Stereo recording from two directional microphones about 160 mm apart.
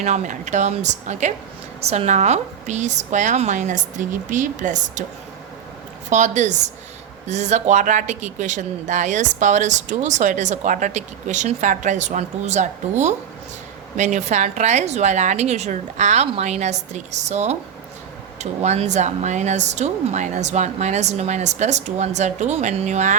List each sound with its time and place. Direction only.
0.0 s speech: 50° right (ahead or behind)
6.1 s speech: 50° right (ahead or behind)